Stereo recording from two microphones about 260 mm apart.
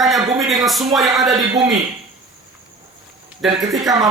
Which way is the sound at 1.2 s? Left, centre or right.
Centre.